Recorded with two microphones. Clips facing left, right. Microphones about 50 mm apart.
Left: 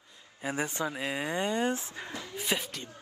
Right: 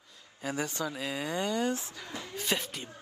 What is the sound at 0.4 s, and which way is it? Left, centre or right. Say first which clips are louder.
Speech: left 1 dB; left.